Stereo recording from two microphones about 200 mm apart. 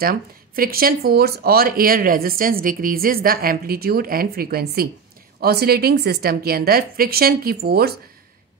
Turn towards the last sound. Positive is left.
turn(degrees=-50)  # may be behind; listen again after turning